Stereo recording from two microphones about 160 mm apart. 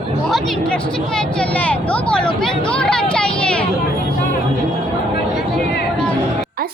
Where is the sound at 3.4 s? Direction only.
5° left (ahead or behind).